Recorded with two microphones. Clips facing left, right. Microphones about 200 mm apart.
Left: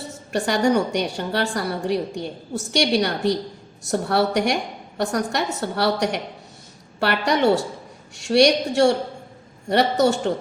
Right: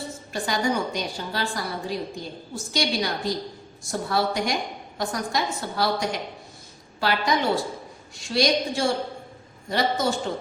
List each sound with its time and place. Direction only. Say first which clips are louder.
0.3 s a woman's voice: left 6 dB; 70° left (ahead or behind)